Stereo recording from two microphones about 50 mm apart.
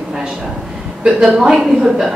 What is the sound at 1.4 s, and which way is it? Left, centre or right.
Speech, centre.